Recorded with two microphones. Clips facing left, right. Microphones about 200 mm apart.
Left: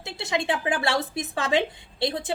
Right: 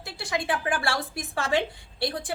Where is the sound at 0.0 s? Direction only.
25° left (ahead or behind).